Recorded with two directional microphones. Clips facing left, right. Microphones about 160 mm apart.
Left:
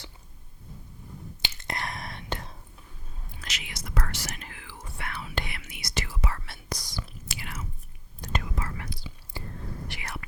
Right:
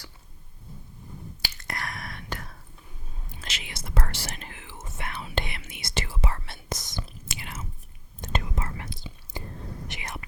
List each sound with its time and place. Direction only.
1.4 s whispering: 20° left (ahead or behind)
3.4 s whispering: 25° right (ahead or behind)